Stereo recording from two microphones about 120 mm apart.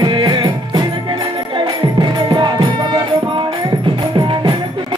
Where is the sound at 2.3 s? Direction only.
40° right (ahead or behind).